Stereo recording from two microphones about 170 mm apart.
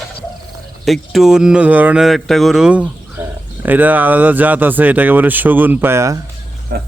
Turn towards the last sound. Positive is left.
turn(degrees=-70)  # may be behind; listen again after turning